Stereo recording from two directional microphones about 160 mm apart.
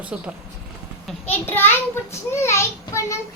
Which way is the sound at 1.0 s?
10° left (ahead or behind).